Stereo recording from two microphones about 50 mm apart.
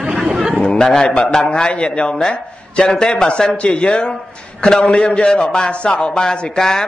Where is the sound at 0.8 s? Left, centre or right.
Centre.